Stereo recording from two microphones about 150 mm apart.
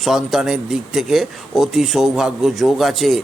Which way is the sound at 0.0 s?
Centre (ahead or behind).